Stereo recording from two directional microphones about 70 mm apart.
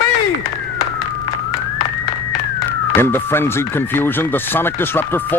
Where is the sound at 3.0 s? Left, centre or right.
Left.